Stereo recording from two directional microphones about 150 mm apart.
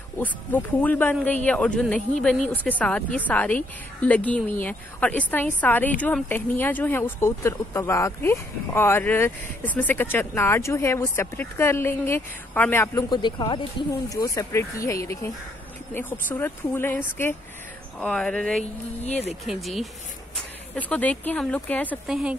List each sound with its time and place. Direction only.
0.2 s speech: 10° left (ahead or behind)
13.1 s speech: 30° left (ahead or behind); by 21.9 s 10° left (ahead or behind)
22.0 s speech: 5° right (ahead or behind)